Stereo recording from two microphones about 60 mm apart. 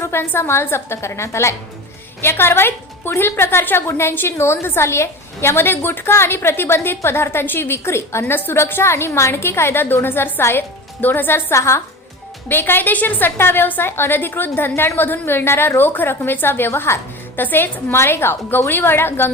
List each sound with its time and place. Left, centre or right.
0.0 s a sound: left
0.3 s a woman's voice: left
11.5 s a woman's voice: left
12.5 s a woman's voice: left